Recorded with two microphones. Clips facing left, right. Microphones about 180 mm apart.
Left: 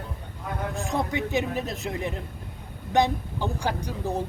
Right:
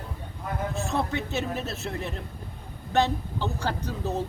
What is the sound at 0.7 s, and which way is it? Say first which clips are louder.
A man's voice: left 1 dB; 15° left (ahead or behind).